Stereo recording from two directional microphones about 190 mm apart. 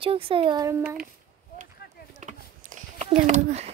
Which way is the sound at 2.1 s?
40° right (ahead or behind).